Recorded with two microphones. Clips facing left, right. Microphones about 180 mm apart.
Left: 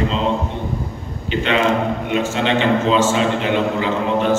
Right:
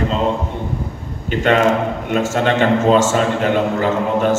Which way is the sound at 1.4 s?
45° right (ahead or behind).